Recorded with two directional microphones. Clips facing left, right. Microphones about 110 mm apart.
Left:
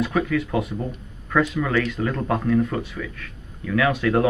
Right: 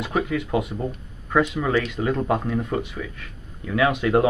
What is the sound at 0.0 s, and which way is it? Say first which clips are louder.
Speech: left 2 dB; 20° right (ahead or behind).